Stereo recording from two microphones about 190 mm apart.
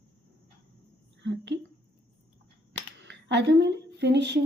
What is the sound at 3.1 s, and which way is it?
A woman's voice, 65° right (ahead or behind).